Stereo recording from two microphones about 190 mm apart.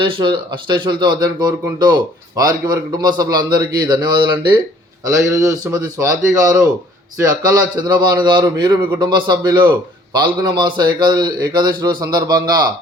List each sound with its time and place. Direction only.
0.0 s a man's voice: 25° right (ahead or behind)